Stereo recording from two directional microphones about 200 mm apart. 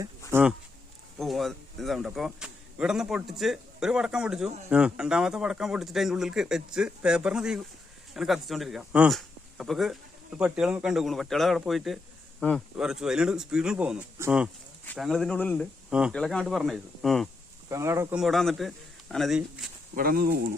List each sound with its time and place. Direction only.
0.3 s speech: 10° right (ahead or behind)
1.2 s speech: centre (ahead or behind)
15.9 s speech: 5° right (ahead or behind)
17.7 s speech: 15° right (ahead or behind)
18.2 s speech: centre (ahead or behind)
20.0 s speech: 45° right (ahead or behind)